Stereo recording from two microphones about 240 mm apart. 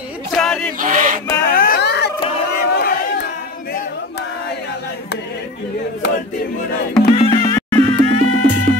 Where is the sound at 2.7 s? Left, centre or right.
Left.